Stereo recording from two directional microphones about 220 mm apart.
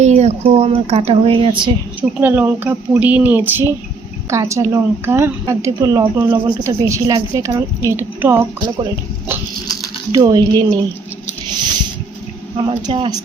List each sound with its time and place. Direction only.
0.0 s speech: 30° right (ahead or behind)
2.0 s a woman's voice: 10° right (ahead or behind)
11.4 s a sound: 20° right (ahead or behind)
12.8 s speech: 20° right (ahead or behind)